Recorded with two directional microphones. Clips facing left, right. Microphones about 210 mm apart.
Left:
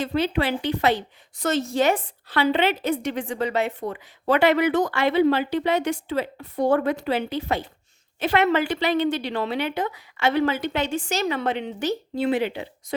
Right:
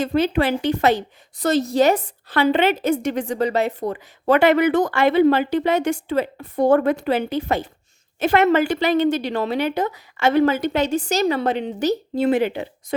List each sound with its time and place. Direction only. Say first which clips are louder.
0.0 s a woman's voice: right 4 dB; 45° right (ahead or behind)